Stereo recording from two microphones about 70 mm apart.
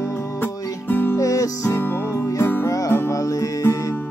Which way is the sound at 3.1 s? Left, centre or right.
Left.